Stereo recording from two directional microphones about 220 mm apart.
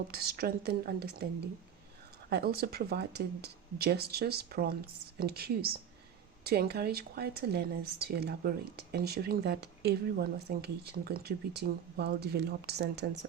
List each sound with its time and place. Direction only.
0.1 s speech: 45° right (ahead or behind)
2.3 s speech: 45° right (ahead or behind)